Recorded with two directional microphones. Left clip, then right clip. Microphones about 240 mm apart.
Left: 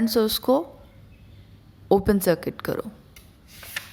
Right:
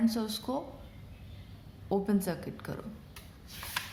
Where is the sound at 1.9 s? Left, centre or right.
Left.